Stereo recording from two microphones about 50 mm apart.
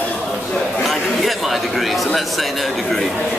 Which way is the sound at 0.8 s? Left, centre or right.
Centre.